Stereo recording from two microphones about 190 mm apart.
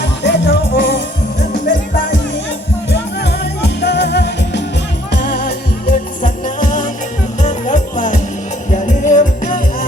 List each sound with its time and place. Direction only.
0.0 s music: 65° left (ahead or behind)
3.6 s music: 65° left (ahead or behind); by 9.6 s 45° left (ahead or behind)